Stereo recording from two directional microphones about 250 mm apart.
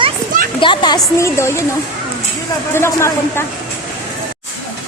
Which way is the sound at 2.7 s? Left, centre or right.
Centre.